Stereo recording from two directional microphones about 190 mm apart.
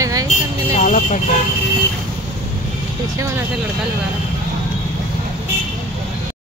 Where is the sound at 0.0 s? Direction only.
20° right (ahead or behind).